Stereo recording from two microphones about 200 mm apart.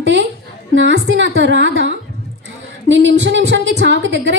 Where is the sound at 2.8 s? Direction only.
65° right (ahead or behind).